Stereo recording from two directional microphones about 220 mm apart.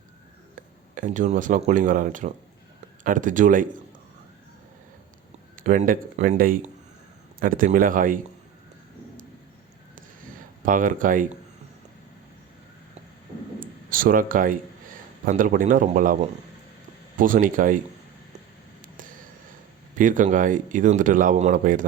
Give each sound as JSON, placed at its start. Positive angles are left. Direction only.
{"t": 0.9, "sound": "speech", "side_deg": -35}
{"t": 5.6, "sound": "speech", "side_deg": -40}
{"t": 10.7, "sound": "speech", "side_deg": -40}
{"t": 13.6, "sound": "speech", "side_deg": -40}
{"t": 17.2, "sound": "speech", "side_deg": -40}
{"t": 20.0, "sound": "speech", "side_deg": -35}